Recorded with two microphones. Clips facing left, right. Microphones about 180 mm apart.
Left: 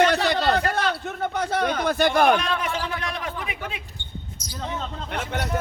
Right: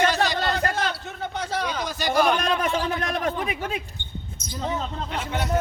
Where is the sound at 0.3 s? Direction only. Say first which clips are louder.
Left 3 dB; 60° left (ahead or behind).